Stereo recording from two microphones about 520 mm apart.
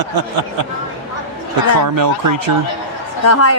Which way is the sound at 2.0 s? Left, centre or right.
Right.